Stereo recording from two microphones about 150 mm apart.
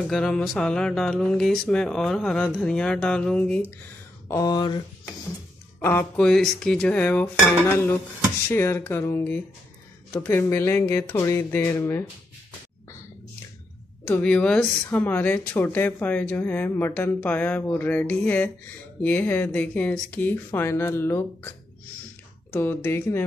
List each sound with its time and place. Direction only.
0.1 s speech: 5° left (ahead or behind)
4.3 s a sound: 25° left (ahead or behind)
5.8 s speech: 15° left (ahead or behind)
6.2 s speech: 5° left (ahead or behind)
14.0 s speech: 10° left (ahead or behind)